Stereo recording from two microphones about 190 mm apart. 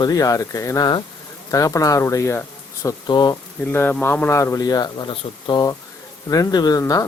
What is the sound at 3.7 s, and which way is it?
Speech, 10° left (ahead or behind).